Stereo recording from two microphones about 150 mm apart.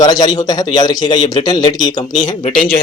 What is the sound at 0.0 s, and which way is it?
Speech, 25° left (ahead or behind).